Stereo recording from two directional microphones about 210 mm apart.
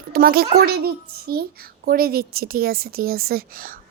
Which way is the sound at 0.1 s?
45° right (ahead or behind).